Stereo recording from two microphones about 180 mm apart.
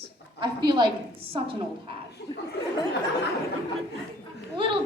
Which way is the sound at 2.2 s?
65° left (ahead or behind).